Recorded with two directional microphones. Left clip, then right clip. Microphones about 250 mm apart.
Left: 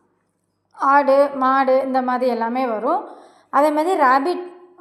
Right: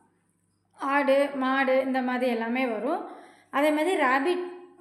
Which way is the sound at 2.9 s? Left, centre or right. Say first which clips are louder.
Left 9 dB; centre.